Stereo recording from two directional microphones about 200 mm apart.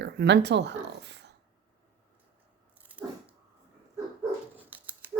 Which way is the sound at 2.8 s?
5° right (ahead or behind).